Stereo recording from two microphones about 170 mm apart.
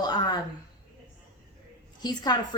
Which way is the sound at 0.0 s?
25° left (ahead or behind).